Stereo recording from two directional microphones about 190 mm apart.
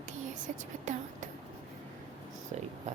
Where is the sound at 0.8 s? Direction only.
40° right (ahead or behind).